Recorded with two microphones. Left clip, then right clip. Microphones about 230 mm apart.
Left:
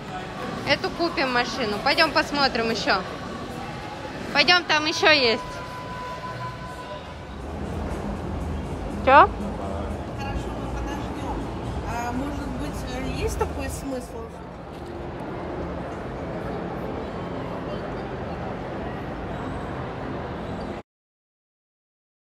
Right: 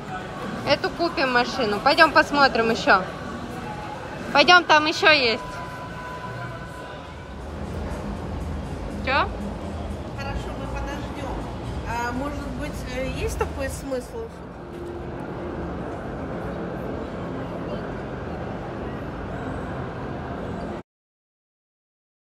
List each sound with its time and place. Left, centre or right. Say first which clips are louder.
0.7 s speech: right 2 dB; centre
4.3 s a woman's voice: right 4 dB; centre
7.9 s music: left 1 dB; left
8.9 s a sound: left 9 dB; left
12.2 s vehicle: even; left